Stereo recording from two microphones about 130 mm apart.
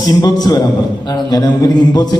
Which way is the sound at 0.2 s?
30° left (ahead or behind).